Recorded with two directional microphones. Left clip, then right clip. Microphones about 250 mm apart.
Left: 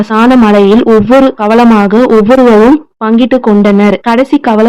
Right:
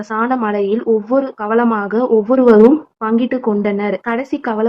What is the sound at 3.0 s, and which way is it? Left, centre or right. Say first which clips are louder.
Speech: left 9 dB; left.